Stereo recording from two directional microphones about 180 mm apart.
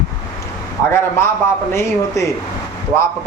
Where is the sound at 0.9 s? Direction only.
15° left (ahead or behind).